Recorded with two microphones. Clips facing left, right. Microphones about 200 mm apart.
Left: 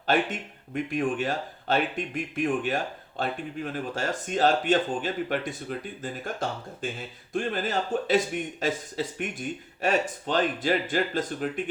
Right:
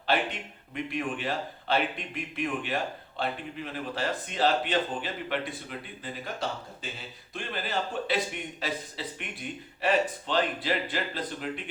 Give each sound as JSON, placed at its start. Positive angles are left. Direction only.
{"t": 0.1, "sound": "speech", "side_deg": 45}